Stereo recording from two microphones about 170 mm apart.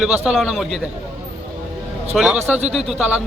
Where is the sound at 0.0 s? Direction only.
5° right (ahead or behind).